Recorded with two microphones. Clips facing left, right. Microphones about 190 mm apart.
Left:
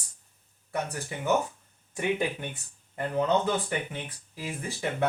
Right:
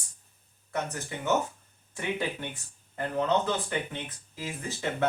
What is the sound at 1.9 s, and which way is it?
Speech, 15° left (ahead or behind).